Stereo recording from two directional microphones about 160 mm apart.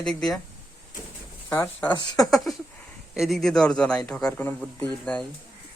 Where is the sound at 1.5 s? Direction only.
15° left (ahead or behind).